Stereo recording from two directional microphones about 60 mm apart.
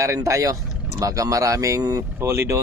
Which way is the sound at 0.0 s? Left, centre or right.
Right.